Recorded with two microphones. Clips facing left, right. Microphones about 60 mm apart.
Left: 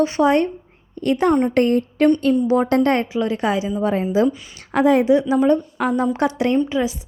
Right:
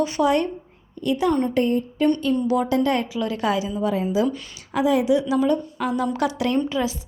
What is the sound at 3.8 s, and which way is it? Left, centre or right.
A woman's voice, left.